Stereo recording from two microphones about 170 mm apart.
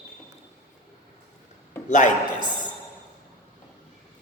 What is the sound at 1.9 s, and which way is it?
Speech, 45° left (ahead or behind).